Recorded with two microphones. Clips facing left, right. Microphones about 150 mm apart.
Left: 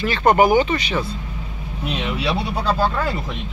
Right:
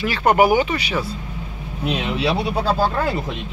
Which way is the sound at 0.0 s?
10° right (ahead or behind).